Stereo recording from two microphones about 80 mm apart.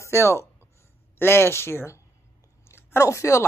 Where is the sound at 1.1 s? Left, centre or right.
Left.